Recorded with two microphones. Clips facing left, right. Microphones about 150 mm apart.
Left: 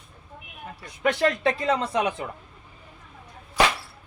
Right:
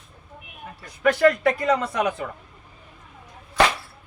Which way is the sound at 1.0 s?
25° left (ahead or behind).